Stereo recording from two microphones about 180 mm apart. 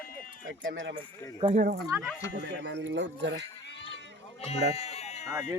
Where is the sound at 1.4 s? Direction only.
50° right (ahead or behind).